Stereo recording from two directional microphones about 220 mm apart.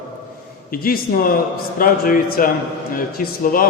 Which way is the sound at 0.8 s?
40° left (ahead or behind).